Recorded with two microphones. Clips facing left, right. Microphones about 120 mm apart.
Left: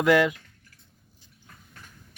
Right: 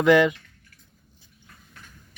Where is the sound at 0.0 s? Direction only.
Centre (ahead or behind).